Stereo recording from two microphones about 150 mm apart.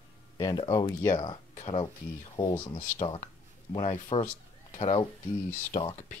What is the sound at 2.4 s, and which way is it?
Speech, 30° left (ahead or behind).